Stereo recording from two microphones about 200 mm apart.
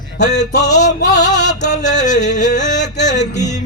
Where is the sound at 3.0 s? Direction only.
35° left (ahead or behind).